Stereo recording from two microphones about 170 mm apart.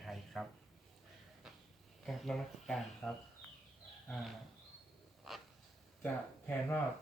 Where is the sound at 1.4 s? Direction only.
5° right (ahead or behind).